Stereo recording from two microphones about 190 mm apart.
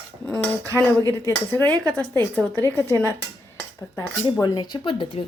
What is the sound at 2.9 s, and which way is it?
Speech, 15° right (ahead or behind).